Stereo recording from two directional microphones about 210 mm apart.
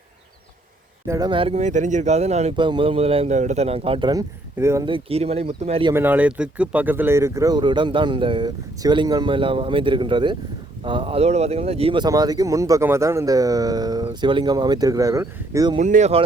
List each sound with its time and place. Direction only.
1.0 s speech: 15° right (ahead or behind)
4.9 s speech: 25° right (ahead or behind)
5.9 s speech: 10° right (ahead or behind)
15.8 s speech: 35° right (ahead or behind)